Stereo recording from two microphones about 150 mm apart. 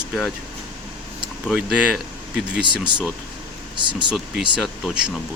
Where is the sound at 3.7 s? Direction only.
30° right (ahead or behind).